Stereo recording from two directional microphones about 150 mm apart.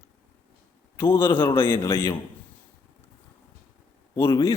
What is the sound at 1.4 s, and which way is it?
Speech, 35° left (ahead or behind).